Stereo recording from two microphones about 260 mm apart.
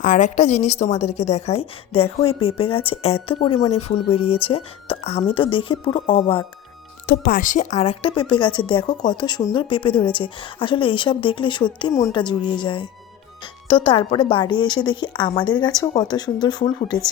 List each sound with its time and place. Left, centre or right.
0.0 s speech: left
7.1 s speech: left; by 17.0 s centre